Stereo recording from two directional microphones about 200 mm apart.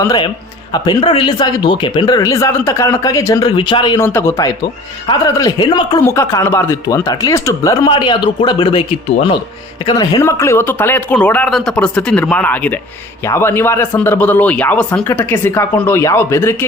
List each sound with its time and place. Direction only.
0.0 s speech: 20° left (ahead or behind)
9.8 s speech: 20° left (ahead or behind)